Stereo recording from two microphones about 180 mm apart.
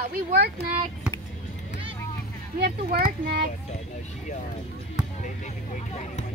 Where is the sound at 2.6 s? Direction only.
55° right (ahead or behind).